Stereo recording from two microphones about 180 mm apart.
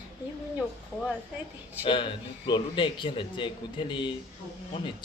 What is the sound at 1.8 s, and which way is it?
Speech, 30° left (ahead or behind).